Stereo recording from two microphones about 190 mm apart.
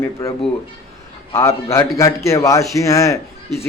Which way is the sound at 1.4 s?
15° left (ahead or behind).